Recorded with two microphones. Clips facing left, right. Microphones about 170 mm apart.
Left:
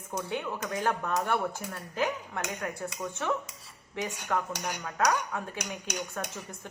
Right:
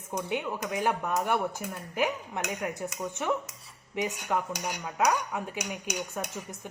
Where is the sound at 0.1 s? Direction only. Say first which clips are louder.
Right 2 dB; 15° right (ahead or behind).